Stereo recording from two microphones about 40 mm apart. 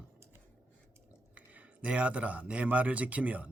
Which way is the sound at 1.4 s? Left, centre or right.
Right.